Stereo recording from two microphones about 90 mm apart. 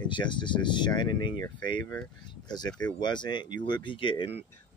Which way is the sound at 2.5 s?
50° left (ahead or behind).